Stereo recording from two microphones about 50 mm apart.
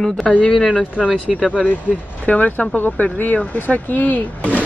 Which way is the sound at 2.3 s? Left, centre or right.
Left.